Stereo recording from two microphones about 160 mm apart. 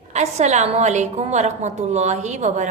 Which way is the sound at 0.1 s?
45° right (ahead or behind).